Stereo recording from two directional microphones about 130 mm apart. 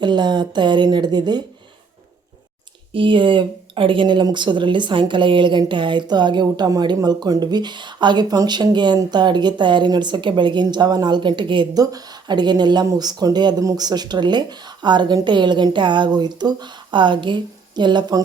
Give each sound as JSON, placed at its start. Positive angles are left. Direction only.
{"t": 0.0, "sound": "speech", "side_deg": -35}
{"t": 2.9, "sound": "speech", "side_deg": -40}